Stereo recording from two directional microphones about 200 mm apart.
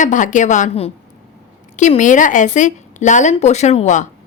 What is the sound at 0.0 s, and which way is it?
A woman's voice, 40° left (ahead or behind).